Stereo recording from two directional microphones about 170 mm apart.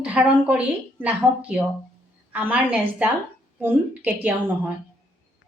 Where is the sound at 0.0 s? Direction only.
10° right (ahead or behind).